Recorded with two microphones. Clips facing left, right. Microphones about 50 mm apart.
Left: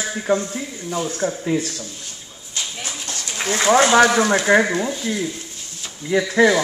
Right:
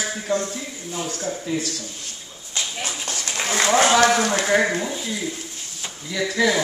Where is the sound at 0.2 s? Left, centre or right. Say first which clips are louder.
Left 6 dB; left.